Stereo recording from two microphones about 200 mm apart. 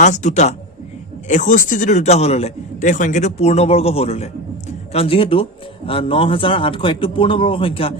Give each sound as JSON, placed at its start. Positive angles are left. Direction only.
{"t": 0.0, "sound": "a man's voice", "side_deg": 35}